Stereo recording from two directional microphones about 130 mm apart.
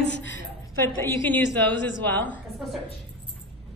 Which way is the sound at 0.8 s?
15° left (ahead or behind).